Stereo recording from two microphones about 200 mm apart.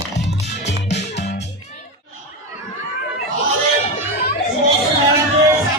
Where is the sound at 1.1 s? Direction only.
55° left (ahead or behind).